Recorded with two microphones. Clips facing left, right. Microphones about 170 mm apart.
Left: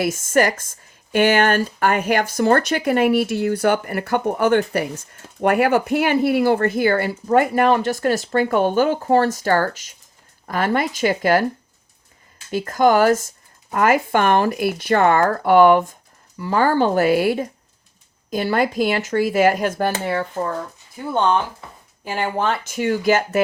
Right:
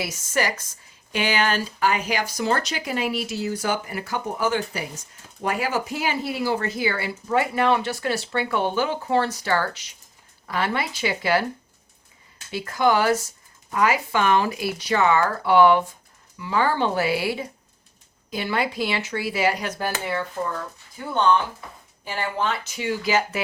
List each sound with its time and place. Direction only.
0.0 s speech: 50° left (ahead or behind)
12.5 s speech: 45° left (ahead or behind)
22.0 s speech: 50° left (ahead or behind)